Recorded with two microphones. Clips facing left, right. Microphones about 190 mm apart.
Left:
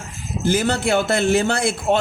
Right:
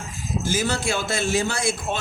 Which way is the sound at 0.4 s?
60° left (ahead or behind).